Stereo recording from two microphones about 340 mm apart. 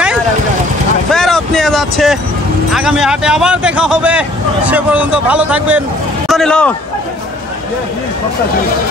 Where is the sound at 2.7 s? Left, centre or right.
Centre.